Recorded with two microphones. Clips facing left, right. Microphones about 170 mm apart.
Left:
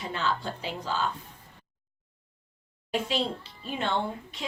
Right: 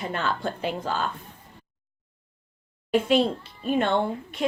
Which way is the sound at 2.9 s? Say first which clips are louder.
Right 8 dB; 55° right (ahead or behind).